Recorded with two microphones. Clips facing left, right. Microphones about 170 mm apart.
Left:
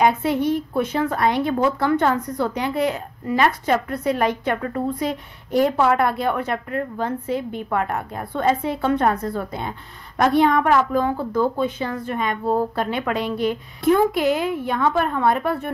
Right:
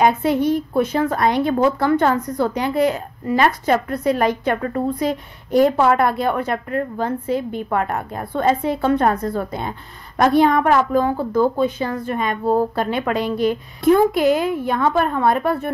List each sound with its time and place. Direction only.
0.0 s speech: 40° right (ahead or behind)